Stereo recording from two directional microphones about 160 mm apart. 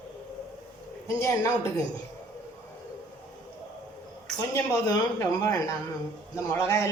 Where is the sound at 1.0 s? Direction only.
20° left (ahead or behind).